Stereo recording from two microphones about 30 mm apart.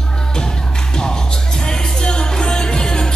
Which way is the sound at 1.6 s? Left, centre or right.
Left.